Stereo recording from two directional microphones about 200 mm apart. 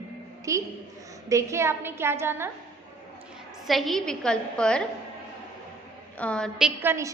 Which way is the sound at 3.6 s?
Centre (ahead or behind).